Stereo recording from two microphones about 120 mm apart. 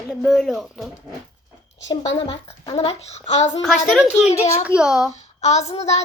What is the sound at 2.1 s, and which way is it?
A child's voice, 55° left (ahead or behind).